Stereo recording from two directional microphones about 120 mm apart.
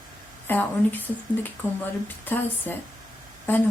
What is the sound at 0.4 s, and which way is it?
Speech, 15° left (ahead or behind).